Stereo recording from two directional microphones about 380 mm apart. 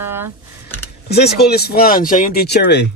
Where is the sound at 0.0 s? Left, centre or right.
Centre.